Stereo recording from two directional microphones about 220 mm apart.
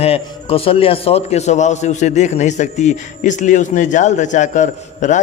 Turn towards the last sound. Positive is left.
turn(degrees=35)  # may be behind; listen again after turning